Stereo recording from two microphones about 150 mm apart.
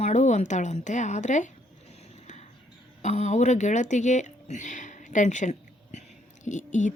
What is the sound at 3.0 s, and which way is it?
Speech, 50° left (ahead or behind).